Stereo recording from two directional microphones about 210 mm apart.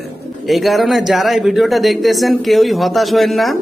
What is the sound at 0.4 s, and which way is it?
Speech, centre (ahead or behind).